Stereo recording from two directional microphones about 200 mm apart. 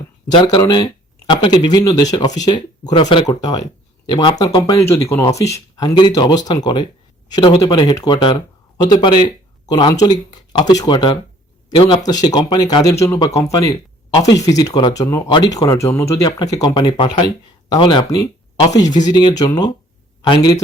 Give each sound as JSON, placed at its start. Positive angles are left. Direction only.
{"t": 0.3, "sound": "speech", "side_deg": 20}